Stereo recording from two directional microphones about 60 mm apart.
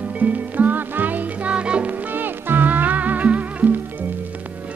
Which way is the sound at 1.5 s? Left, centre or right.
Centre.